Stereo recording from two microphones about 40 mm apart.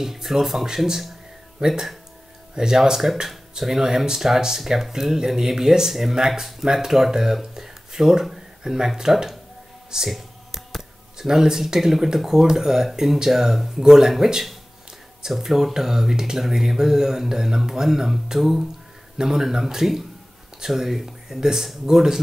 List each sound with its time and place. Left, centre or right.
0.0 s speech: centre
11.1 s speech: centre